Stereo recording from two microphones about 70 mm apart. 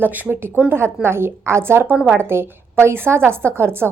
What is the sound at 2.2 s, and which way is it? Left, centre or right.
A woman's voice, right.